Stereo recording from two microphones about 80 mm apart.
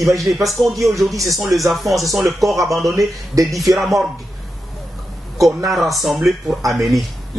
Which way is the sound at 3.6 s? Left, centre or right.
Centre.